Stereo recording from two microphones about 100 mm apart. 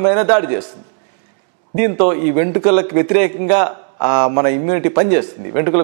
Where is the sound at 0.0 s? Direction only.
15° right (ahead or behind).